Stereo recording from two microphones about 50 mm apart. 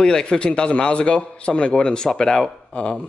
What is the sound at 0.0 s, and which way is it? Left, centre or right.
A man's voice, centre.